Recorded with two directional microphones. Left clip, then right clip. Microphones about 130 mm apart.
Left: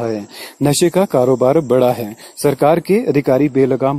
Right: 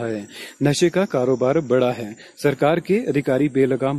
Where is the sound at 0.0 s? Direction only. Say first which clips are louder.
Left 6 dB; 30° left (ahead or behind).